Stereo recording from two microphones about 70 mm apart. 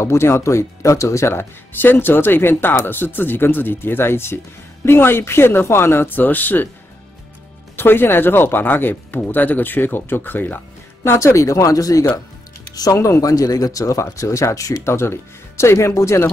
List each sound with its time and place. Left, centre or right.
0.0 s speech: left
7.7 s speech: left
11.1 s speech: left